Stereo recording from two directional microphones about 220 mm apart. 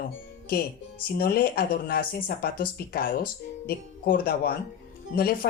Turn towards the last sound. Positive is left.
turn(degrees=45)  # may be behind; listen again after turning